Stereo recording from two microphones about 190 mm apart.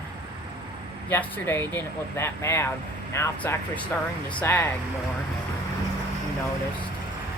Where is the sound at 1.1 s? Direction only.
10° left (ahead or behind).